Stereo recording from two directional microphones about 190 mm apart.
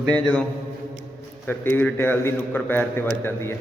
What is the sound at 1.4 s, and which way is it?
Speech, 10° left (ahead or behind).